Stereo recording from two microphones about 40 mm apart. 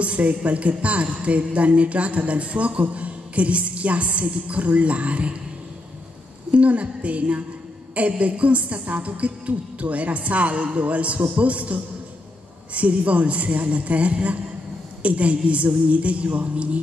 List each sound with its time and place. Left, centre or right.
0.0 s a woman's voice: right
6.5 s a woman's voice: right